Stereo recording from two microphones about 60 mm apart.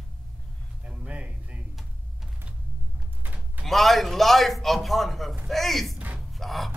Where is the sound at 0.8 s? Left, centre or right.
Centre.